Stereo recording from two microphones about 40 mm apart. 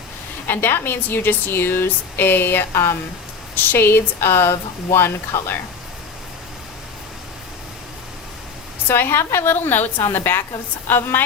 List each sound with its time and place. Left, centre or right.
0.4 s speech: left
8.9 s a woman's voice: left